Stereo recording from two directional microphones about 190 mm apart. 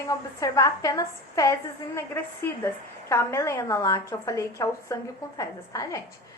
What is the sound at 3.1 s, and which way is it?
A woman's voice, 15° left (ahead or behind).